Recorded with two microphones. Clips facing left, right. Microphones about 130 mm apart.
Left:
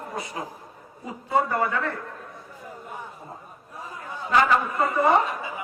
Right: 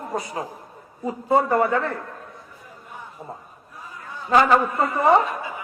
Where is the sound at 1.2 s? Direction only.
30° right (ahead or behind).